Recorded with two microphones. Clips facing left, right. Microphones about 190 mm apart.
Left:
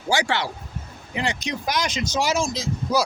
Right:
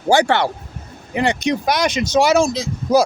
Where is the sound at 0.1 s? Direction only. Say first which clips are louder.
Right 8 dB; 60° right (ahead or behind).